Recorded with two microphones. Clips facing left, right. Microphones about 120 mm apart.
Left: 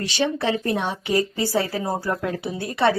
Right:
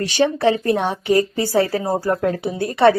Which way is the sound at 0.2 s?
45° right (ahead or behind).